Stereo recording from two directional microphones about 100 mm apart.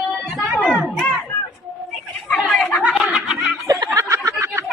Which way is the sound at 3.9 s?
30° right (ahead or behind).